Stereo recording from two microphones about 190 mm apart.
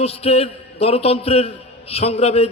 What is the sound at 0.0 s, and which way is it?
A man's voice, 30° left (ahead or behind).